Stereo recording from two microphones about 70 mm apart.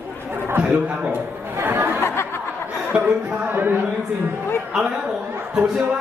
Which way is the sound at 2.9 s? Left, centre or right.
Centre.